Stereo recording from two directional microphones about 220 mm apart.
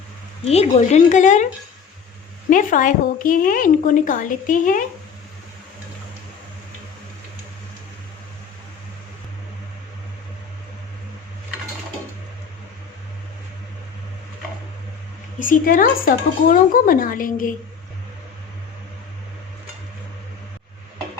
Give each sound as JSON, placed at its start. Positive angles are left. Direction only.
{"t": 0.4, "sound": "a woman's voice", "side_deg": 30}
{"t": 2.5, "sound": "a woman's voice", "side_deg": 35}
{"t": 15.4, "sound": "a woman's voice", "side_deg": 35}